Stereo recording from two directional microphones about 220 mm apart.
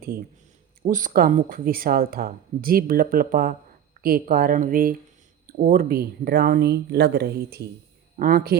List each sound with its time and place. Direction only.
0.0 s speech: 40° right (ahead or behind)